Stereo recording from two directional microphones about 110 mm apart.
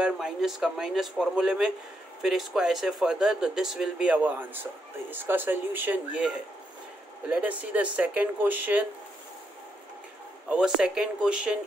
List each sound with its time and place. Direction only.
0.0 s speech: 5° right (ahead or behind)
10.5 s speech: 5° right (ahead or behind)